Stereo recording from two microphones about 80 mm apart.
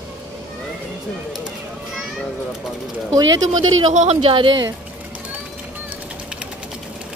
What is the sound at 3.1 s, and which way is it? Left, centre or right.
Speech, right.